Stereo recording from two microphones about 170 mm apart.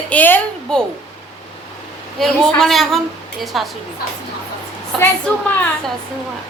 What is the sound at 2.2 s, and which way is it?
A woman's voice, centre (ahead or behind).